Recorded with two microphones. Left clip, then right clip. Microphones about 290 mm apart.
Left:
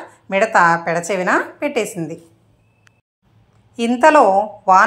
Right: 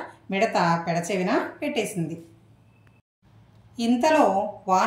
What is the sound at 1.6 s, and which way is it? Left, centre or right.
Speech, left.